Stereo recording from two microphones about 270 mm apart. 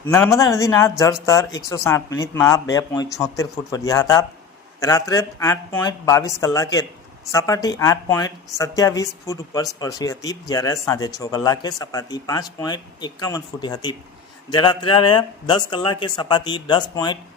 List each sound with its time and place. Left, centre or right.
0.0 s speech: centre